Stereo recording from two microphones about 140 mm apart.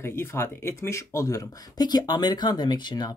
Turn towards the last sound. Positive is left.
turn(degrees=30)  # may be behind; listen again after turning